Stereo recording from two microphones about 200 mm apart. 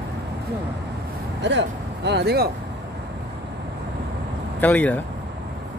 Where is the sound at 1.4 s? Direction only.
60° right (ahead or behind).